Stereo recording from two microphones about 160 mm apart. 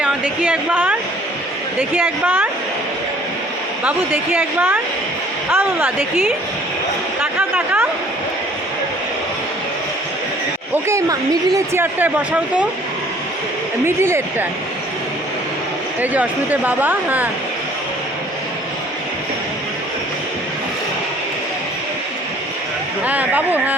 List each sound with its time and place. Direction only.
0.0 s a woman's voice: 10° right (ahead or behind)
3.8 s speech: 10° right (ahead or behind)
10.8 s speech: 20° right (ahead or behind)
13.8 s speech: 15° right (ahead or behind)
16.0 s speech: 10° right (ahead or behind)
23.0 s speech: 10° right (ahead or behind)